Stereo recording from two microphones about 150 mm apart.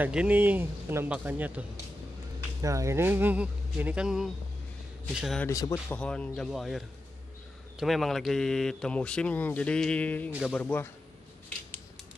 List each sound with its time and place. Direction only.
0.0 s speech: 10° right (ahead or behind)
2.6 s speech: 20° right (ahead or behind); by 5.4 s centre (ahead or behind)
5.5 s speech: 20° left (ahead or behind)
5.9 s speech: 5° left (ahead or behind)
7.8 s speech: centre (ahead or behind)